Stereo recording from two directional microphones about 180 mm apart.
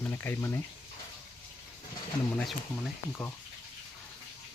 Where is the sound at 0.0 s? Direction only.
15° left (ahead or behind).